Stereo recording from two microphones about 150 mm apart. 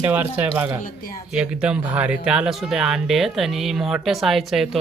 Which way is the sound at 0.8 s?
70° left (ahead or behind).